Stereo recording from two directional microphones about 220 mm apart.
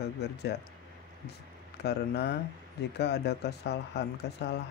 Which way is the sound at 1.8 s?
50° left (ahead or behind).